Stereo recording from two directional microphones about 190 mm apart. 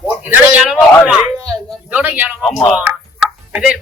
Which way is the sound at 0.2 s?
5° right (ahead or behind).